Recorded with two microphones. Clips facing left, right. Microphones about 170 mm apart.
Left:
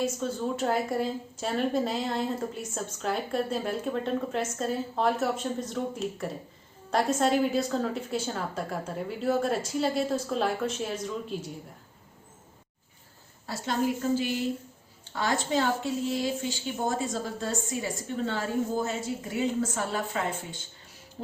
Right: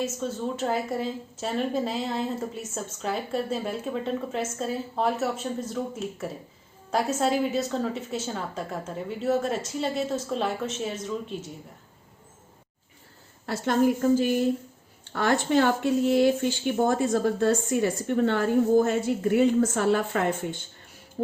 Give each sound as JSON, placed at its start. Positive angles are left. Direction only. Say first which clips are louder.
{"t": 0.0, "sound": "a woman's voice", "louder": "even", "side_deg": 0}
{"t": 13.4, "sound": "a woman's voice", "louder": "right 6 dB", "side_deg": -55}
{"t": 15.0, "sound": "speech", "louder": "right 5 dB", "side_deg": -60}